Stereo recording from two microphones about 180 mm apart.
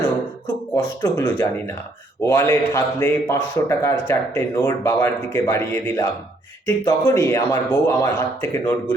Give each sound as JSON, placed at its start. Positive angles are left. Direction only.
{"t": 0.7, "sound": "a man's voice", "side_deg": 15}